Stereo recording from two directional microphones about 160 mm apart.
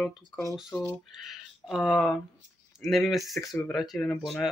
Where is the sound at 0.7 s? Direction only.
15° left (ahead or behind).